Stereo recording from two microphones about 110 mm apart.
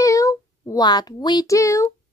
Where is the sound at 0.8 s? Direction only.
40° left (ahead or behind).